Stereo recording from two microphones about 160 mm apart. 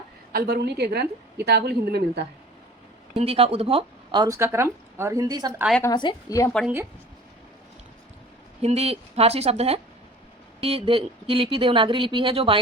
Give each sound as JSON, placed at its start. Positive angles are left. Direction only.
{"t": 0.3, "sound": "a woman's voice", "side_deg": -85}
{"t": 3.2, "sound": "speech", "side_deg": -40}
{"t": 4.4, "sound": "speech", "side_deg": -15}
{"t": 5.8, "sound": "a woman's voice", "side_deg": 30}
{"t": 8.6, "sound": "speech", "side_deg": -40}